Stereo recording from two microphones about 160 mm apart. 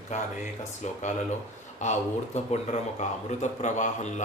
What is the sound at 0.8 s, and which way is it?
Speech, 45° left (ahead or behind).